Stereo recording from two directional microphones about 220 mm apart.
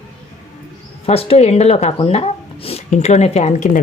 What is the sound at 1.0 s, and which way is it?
Speech, 25° left (ahead or behind).